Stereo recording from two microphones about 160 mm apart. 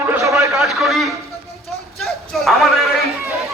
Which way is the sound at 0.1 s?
20° right (ahead or behind).